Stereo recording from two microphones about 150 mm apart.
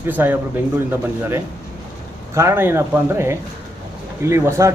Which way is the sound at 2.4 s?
15° right (ahead or behind).